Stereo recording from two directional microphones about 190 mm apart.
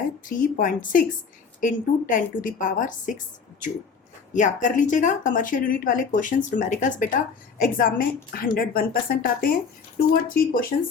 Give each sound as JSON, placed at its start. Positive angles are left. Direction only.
{"t": 0.3, "sound": "speech", "side_deg": 45}
{"t": 4.4, "sound": "speech", "side_deg": 40}